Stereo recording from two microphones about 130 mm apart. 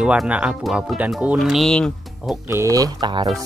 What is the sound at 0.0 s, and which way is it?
Speech, 10° right (ahead or behind).